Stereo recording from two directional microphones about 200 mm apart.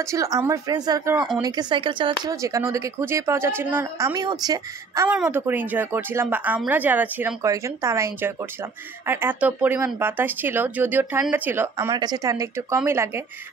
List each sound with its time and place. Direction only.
0.0 s speech: 15° right (ahead or behind)